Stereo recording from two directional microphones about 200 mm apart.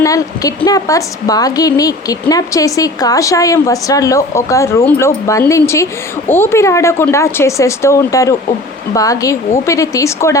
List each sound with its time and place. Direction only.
0.0 s a woman's voice: 15° left (ahead or behind)